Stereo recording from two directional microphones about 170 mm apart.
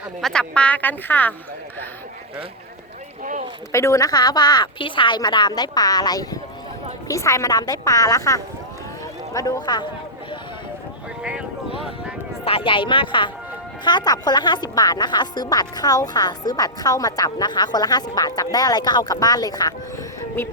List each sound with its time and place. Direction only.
0.2 s speech: 5° left (ahead or behind)
3.7 s speech: 15° left (ahead or behind)
11.2 s a sound: 5° right (ahead or behind)
12.5 s speech: 30° left (ahead or behind); by 20.5 s 15° left (ahead or behind)